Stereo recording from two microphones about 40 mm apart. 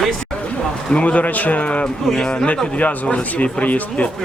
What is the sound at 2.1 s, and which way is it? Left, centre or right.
Speech, centre.